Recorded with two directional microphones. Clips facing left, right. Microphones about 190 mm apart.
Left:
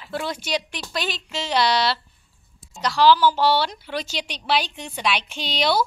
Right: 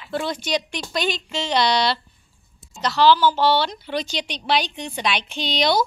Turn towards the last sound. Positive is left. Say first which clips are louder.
# right 2 dB
turn(degrees=5)  # may be behind; listen again after turning